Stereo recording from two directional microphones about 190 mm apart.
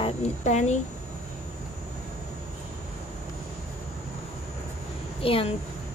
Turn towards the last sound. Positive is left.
turn(degrees=30)  # may be behind; listen again after turning